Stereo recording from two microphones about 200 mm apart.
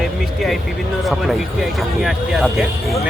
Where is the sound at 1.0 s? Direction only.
Centre (ahead or behind).